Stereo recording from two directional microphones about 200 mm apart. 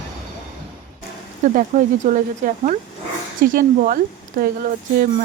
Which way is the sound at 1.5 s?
40° right (ahead or behind).